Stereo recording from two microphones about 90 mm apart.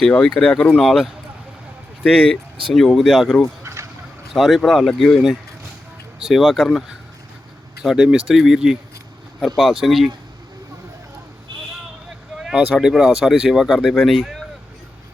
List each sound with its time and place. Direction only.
0.0 s speech: 10° left (ahead or behind)
0.8 s speech: centre (ahead or behind)
3.6 s a sound: 30° right (ahead or behind)
4.4 s speech: centre (ahead or behind)
9.8 s speech: centre (ahead or behind)
12.8 s speech: centre (ahead or behind)